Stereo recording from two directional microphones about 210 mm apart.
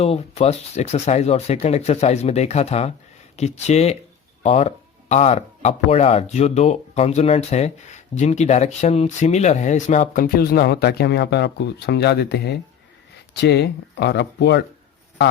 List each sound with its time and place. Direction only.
0.0 s speech: 30° left (ahead or behind); by 14.6 s 55° left (ahead or behind)